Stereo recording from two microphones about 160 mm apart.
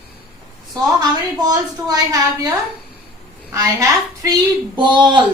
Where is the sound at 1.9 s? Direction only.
20° right (ahead or behind).